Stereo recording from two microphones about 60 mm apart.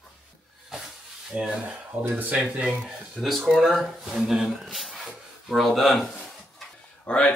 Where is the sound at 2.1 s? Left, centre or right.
Right.